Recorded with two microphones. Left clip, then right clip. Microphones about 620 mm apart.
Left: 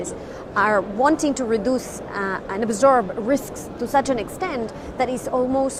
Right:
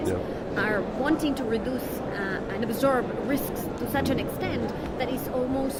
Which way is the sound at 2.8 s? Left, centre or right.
Left.